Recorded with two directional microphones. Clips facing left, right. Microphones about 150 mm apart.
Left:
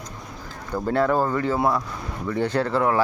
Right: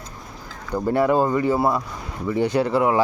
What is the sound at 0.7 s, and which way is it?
Speech, 10° right (ahead or behind).